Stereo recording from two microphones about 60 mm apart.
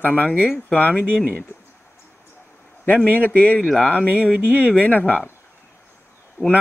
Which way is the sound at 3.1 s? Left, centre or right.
Left.